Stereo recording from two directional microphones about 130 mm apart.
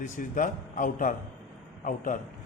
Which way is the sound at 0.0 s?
90° left.